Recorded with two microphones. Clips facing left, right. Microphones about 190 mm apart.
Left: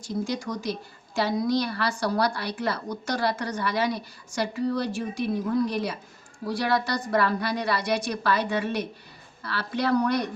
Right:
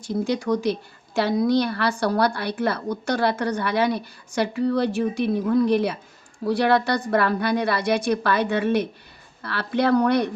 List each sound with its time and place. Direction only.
0.0 s a woman's voice: 60° right (ahead or behind)